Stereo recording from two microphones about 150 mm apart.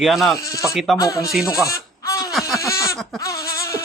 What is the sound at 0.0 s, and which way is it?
Speech, centre (ahead or behind).